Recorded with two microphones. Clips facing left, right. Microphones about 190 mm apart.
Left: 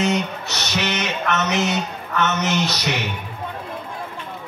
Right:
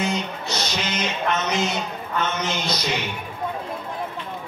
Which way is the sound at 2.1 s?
75° left (ahead or behind).